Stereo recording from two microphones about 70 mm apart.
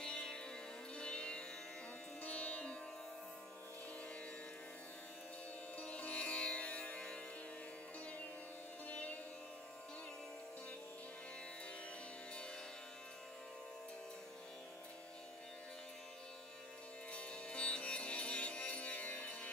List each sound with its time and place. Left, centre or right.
0.0 s music: centre
5.8 s music: centre
8.8 s music: left
17.1 s music: centre